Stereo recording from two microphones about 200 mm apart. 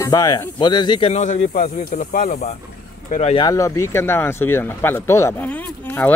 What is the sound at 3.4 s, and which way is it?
Speech, 15° left (ahead or behind).